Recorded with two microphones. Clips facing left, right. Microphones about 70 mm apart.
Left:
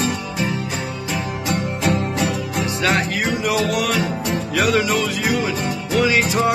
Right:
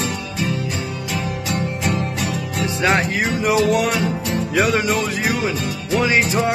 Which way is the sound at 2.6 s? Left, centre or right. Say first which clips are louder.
Right 3 dB; right.